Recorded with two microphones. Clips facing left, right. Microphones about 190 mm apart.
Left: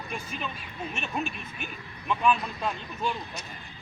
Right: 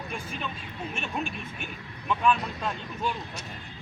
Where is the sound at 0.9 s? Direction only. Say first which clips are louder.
Left 1 dB; 5° left (ahead or behind).